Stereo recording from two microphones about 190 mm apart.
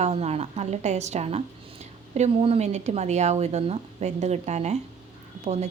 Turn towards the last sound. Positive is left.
turn(degrees=-35)  # may be behind; listen again after turning